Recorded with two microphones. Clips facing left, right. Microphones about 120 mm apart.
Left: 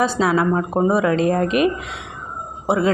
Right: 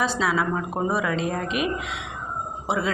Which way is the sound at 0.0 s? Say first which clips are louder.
Left 6 dB; 45° left (ahead or behind).